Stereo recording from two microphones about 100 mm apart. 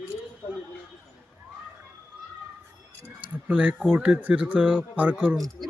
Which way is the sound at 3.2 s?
15° right (ahead or behind).